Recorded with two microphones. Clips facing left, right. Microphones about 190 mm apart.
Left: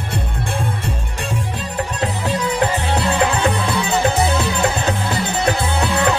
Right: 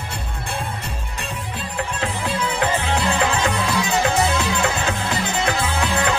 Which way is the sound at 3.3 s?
35° left (ahead or behind).